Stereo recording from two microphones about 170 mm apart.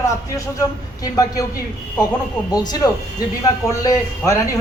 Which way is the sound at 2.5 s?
25° left (ahead or behind).